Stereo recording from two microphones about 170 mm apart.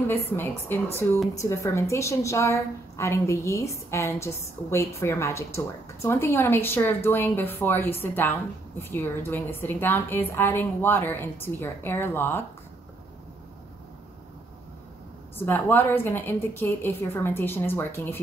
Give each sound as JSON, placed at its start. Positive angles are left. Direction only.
{"t": 0.1, "sound": "a woman's voice", "side_deg": 10}
{"t": 15.3, "sound": "a woman's voice", "side_deg": 10}